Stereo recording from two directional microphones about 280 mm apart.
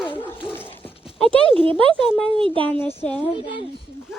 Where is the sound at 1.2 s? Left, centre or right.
Centre.